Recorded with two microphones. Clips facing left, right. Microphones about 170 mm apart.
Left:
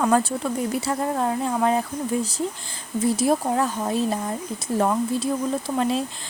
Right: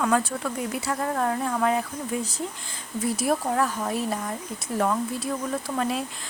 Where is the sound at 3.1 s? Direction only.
25° left (ahead or behind).